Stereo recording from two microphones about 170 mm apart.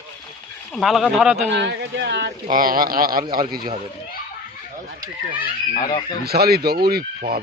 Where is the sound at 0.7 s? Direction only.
Centre (ahead or behind).